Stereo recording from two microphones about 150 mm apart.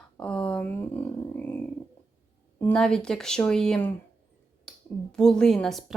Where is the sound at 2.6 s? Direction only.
5° left (ahead or behind).